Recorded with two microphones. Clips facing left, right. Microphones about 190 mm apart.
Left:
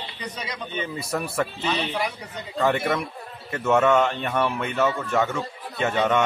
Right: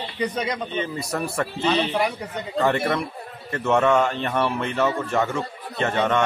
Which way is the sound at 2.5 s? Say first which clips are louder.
Right 1 dB; centre (ahead or behind).